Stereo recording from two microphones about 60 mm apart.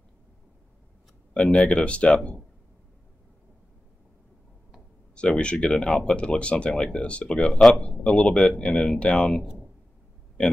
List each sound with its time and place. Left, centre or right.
1.3 s speech: centre
5.1 s speech: centre
7.3 s speech: centre
7.9 s speech: centre